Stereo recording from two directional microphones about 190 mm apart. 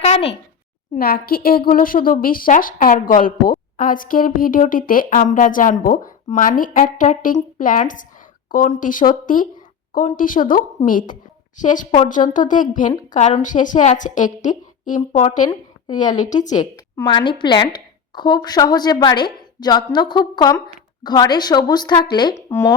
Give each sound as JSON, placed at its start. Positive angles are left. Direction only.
{"t": 0.0, "sound": "speech", "side_deg": 30}
{"t": 0.9, "sound": "a woman's voice", "side_deg": 50}
{"t": 16.6, "sound": "a woman's voice", "side_deg": 20}